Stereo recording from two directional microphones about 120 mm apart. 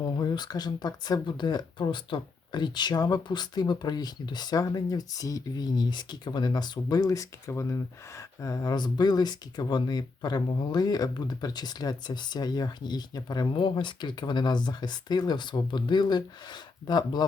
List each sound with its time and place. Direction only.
0.0 s speech: 35° left (ahead or behind)